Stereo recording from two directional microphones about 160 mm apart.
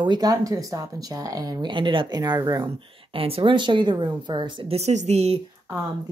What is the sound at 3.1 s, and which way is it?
A woman's voice, 35° right (ahead or behind).